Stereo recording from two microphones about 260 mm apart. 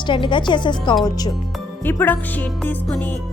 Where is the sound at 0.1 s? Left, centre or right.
Centre.